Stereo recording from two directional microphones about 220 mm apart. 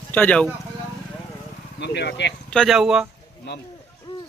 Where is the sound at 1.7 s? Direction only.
50° left (ahead or behind).